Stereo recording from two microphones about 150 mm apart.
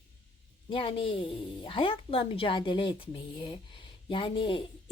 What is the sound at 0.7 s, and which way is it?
Speech, 35° left (ahead or behind).